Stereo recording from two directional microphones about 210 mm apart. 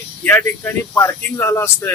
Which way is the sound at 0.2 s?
10° left (ahead or behind).